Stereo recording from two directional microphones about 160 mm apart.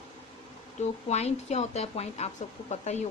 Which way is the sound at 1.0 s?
45° left (ahead or behind).